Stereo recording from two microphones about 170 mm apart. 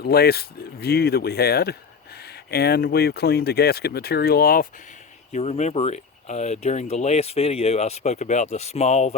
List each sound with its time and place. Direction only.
0.0 s speech: 65° left (ahead or behind)
5.3 s speech: 40° left (ahead or behind)